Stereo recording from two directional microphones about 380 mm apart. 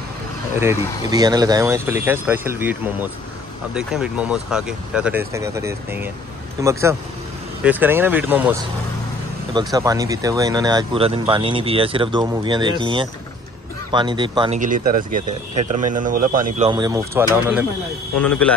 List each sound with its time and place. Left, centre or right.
0.6 s speech: centre